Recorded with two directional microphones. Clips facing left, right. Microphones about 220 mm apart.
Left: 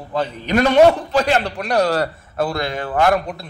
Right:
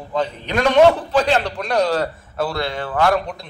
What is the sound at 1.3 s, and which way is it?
A man's voice, 10° left (ahead or behind).